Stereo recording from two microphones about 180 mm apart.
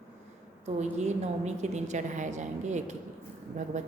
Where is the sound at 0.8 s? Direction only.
40° right (ahead or behind).